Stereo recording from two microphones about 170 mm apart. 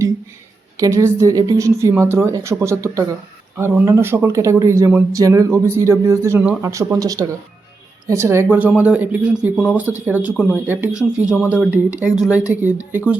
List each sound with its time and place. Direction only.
0.8 s speech: 20° right (ahead or behind)